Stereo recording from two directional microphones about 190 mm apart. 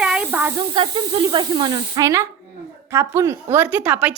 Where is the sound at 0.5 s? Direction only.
25° right (ahead or behind).